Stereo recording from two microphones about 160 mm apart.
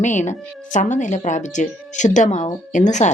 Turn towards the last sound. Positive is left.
turn(degrees=50)  # may be behind; listen again after turning